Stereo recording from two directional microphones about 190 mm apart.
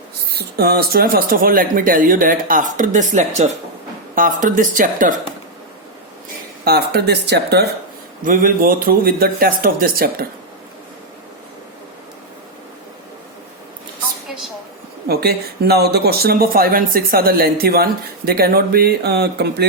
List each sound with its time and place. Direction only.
0.3 s speech: 55° right (ahead or behind)
6.7 s speech: 60° right (ahead or behind)
8.2 s speech: 45° right (ahead or behind)
15.0 s speech: 55° right (ahead or behind)